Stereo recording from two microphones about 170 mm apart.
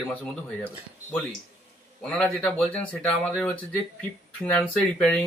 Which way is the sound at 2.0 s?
5° left (ahead or behind).